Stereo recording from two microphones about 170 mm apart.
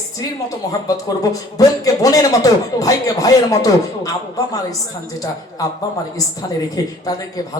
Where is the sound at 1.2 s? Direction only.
20° left (ahead or behind).